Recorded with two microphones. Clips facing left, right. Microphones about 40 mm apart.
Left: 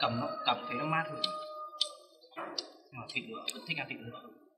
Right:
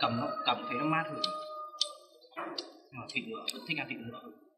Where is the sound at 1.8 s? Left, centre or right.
Left.